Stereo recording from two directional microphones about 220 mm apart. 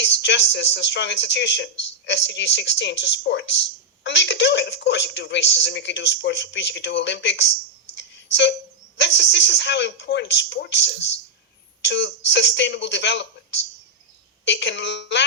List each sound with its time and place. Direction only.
0.0 s speech: 55° left (ahead or behind)
7.9 s a sound: 55° left (ahead or behind)
9.0 s speech: 55° left (ahead or behind)